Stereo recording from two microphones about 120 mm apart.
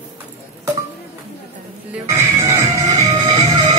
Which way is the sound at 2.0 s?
25° right (ahead or behind).